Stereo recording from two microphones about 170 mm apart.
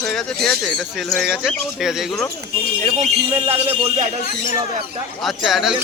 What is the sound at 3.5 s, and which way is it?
Music, 35° right (ahead or behind).